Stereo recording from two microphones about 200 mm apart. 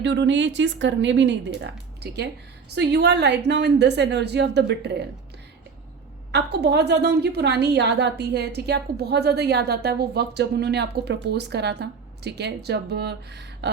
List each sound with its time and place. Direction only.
0.0 s a woman's voice: 60° right (ahead or behind)
6.3 s a woman's voice: 55° right (ahead or behind)